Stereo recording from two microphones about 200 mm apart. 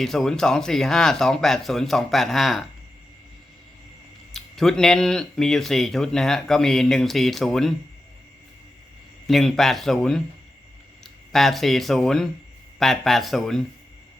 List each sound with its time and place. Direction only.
0.0 s speech: centre (ahead or behind)
4.4 s speech: centre (ahead or behind)
9.2 s speech: centre (ahead or behind)
11.3 s speech: centre (ahead or behind)